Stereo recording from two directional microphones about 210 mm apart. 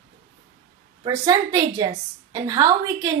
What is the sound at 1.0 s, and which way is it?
A woman's voice, 15° right (ahead or behind).